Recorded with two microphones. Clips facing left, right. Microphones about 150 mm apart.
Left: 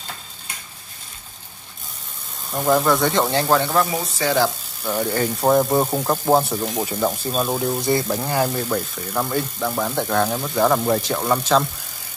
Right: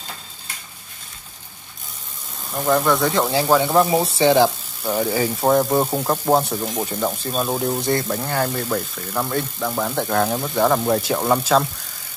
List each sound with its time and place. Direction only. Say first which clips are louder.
2.5 s speech: left 1 dB; 5° left (ahead or behind)
3.7 s speech: right 4 dB; 25° right (ahead or behind)
4.8 s speech: right 1 dB; 5° right (ahead or behind)